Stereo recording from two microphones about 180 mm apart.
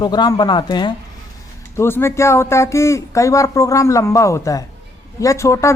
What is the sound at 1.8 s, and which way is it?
Speech, 15° left (ahead or behind).